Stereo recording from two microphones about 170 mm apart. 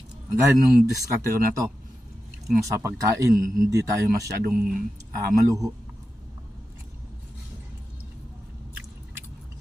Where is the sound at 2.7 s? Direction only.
20° right (ahead or behind).